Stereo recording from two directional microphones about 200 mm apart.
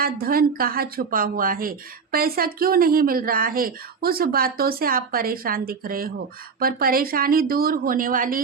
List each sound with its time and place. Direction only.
0.0 s speech: 45° right (ahead or behind)